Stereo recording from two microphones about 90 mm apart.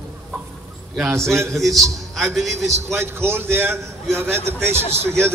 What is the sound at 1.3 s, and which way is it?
Speech, 30° right (ahead or behind).